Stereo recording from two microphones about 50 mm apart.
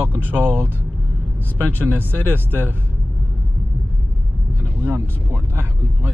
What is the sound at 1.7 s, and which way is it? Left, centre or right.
Speech, right.